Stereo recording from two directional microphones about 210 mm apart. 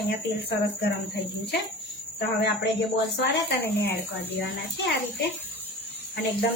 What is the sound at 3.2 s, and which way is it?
Speech, 55° left (ahead or behind).